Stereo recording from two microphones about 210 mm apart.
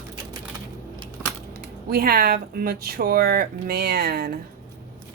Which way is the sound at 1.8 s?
45° right (ahead or behind).